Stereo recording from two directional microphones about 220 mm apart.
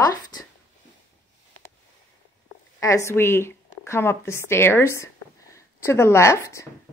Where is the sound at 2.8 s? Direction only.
15° left (ahead or behind).